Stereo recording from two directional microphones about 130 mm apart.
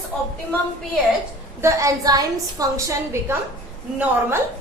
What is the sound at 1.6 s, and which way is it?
A woman's voice, 25° right (ahead or behind).